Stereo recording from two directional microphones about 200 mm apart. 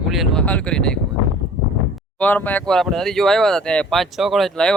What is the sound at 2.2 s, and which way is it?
Speech, 10° left (ahead or behind).